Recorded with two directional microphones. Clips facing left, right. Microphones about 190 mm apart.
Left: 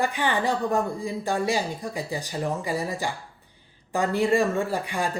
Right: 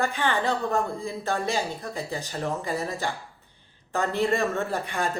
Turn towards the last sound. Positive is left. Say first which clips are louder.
# left 2 dB
turn(degrees=10)  # may be behind; listen again after turning